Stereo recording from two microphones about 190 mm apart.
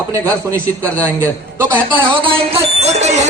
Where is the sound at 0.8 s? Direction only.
10° left (ahead or behind).